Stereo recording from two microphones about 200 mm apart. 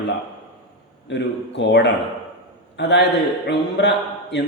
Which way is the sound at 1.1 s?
60° left (ahead or behind).